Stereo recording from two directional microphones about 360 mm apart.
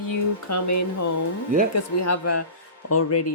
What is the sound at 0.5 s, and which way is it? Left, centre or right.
Speech, left.